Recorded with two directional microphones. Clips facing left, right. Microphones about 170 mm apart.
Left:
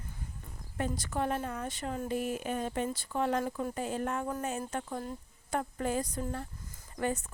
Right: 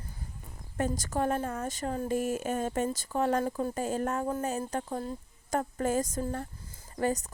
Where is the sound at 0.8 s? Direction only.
40° right (ahead or behind).